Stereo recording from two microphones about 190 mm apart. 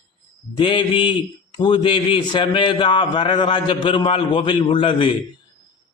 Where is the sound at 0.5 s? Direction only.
25° left (ahead or behind).